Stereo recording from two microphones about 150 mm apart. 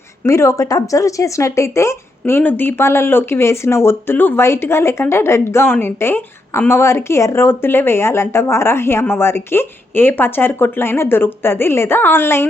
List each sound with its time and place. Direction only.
0.3 s speech: 20° left (ahead or behind)